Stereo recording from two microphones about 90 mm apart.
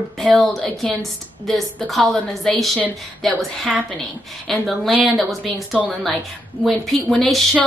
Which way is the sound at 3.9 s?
10° left (ahead or behind).